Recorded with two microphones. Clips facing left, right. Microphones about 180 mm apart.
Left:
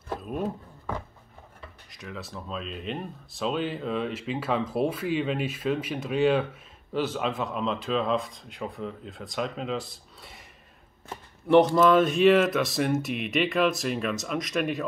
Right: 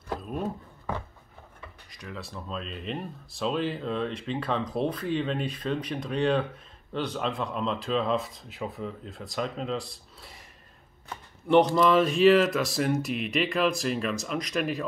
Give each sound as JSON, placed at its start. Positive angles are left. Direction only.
{"t": 0.1, "sound": "a sound", "side_deg": 0}
{"t": 1.9, "sound": "speech", "side_deg": 0}
{"t": 11.4, "sound": "speech", "side_deg": 0}